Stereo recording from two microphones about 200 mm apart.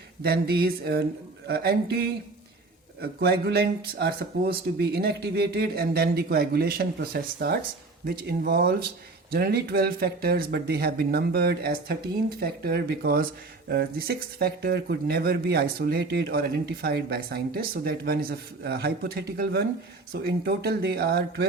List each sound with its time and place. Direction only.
0.2 s speech: 50° right (ahead or behind)